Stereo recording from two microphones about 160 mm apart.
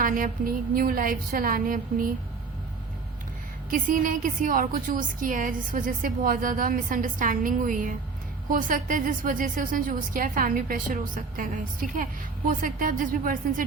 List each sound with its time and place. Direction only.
0.0 s a woman's voice: 60° right (ahead or behind)
3.7 s a woman's voice: 55° right (ahead or behind)